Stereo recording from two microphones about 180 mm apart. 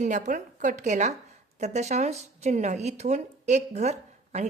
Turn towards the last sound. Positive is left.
turn(degrees=-40)  # may be behind; listen again after turning